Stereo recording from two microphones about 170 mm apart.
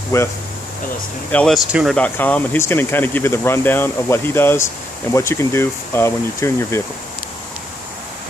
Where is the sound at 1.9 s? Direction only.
10° left (ahead or behind).